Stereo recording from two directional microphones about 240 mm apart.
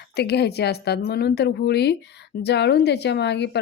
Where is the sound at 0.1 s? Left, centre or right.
Left.